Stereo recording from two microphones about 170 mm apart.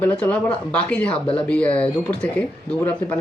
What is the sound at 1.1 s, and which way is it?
Speech, 30° left (ahead or behind).